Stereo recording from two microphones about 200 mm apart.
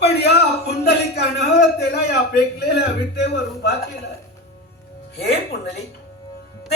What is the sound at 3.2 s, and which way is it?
Speech, 55° left (ahead or behind).